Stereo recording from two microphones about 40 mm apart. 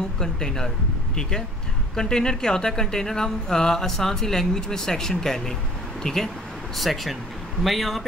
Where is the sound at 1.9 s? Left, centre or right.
Centre.